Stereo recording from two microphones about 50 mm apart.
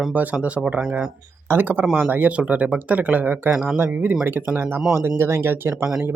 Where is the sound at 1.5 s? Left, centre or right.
Right.